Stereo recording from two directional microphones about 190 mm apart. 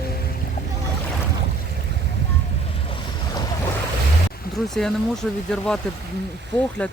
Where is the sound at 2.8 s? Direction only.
25° left (ahead or behind).